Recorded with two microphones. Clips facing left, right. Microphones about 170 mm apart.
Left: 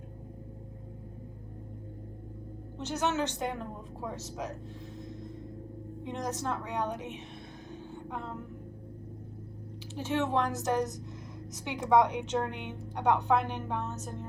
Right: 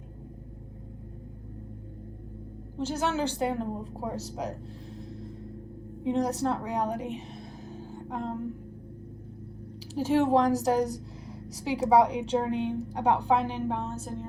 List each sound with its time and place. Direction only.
2.9 s a woman's voice: 30° right (ahead or behind)
6.1 s a woman's voice: 35° right (ahead or behind)
7.9 s a sound: 35° right (ahead or behind)
9.9 s a woman's voice: 35° right (ahead or behind)